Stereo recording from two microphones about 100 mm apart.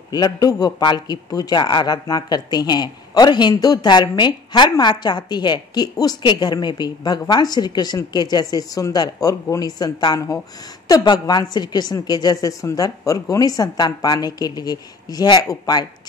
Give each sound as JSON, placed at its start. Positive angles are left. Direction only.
{"t": 0.1, "sound": "a man's voice", "side_deg": 40}